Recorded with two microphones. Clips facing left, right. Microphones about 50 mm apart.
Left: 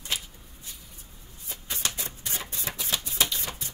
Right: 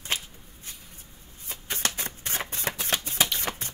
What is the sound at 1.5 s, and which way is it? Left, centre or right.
Shuffling cards, right.